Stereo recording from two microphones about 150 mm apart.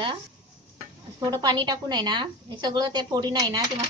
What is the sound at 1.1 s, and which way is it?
A woman's voice, 25° right (ahead or behind).